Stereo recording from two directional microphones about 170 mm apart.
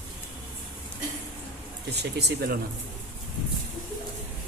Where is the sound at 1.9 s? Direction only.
70° right (ahead or behind).